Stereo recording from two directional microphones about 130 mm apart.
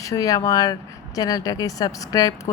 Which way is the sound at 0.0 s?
25° left (ahead or behind).